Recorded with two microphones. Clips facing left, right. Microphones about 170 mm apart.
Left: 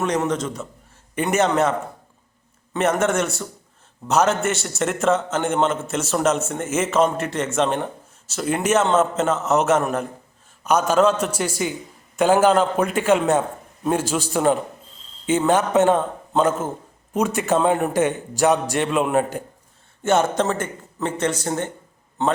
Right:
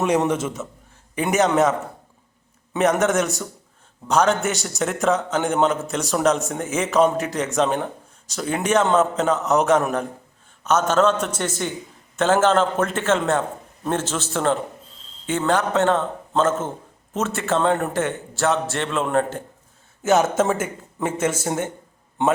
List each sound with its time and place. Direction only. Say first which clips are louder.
0.0 s a man's voice: right 2 dB; 15° right (ahead or behind)
2.7 s a man's voice: right 1 dB; centre (ahead or behind)
20.0 s speech: right 1 dB; centre (ahead or behind)